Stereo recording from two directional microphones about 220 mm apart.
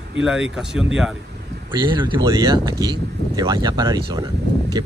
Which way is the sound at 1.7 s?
20° right (ahead or behind).